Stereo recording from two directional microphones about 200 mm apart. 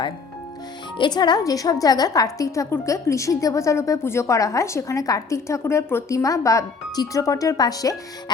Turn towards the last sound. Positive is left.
turn(degrees=20)  # may be behind; listen again after turning